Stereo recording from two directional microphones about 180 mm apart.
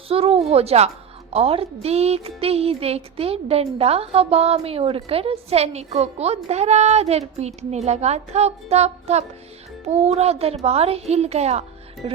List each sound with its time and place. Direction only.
0.1 s speech: 35° right (ahead or behind)
12.0 s music: 30° right (ahead or behind)